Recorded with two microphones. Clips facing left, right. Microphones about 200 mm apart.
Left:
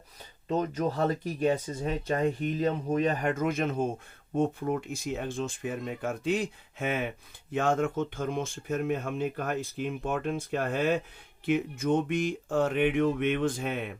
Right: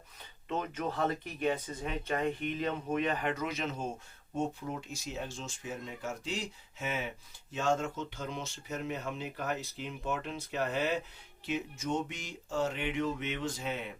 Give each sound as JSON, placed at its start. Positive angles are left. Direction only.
{"t": 0.4, "sound": "speech", "side_deg": 35}